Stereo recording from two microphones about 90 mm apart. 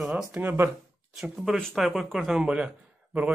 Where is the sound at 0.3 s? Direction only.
20° right (ahead or behind).